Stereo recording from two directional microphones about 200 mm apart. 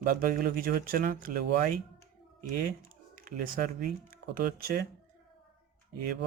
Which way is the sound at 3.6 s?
45° right (ahead or behind).